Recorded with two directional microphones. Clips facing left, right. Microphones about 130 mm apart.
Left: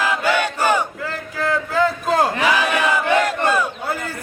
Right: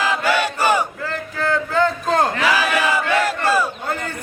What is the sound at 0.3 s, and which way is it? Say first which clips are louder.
Battle cry: even; 10° right (ahead or behind).